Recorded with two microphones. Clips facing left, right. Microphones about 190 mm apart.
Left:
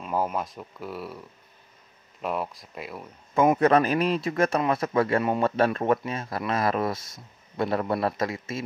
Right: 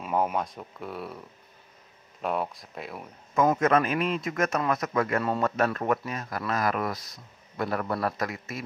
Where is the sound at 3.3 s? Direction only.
30° left (ahead or behind).